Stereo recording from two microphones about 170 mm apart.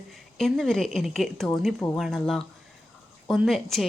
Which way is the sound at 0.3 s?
Centre (ahead or behind).